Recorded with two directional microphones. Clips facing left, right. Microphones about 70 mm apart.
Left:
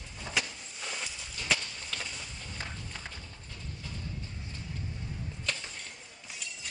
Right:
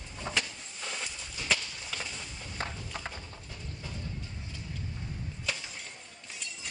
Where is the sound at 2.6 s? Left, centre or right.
Right.